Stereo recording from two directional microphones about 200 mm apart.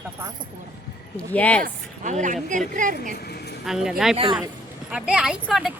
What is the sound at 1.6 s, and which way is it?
A woman's voice, 40° right (ahead or behind).